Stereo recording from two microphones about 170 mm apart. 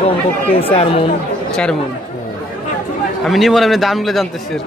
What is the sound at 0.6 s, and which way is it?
Speech, 35° left (ahead or behind).